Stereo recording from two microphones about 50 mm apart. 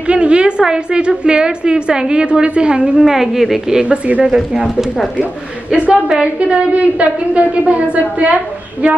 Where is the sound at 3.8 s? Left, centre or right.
Right.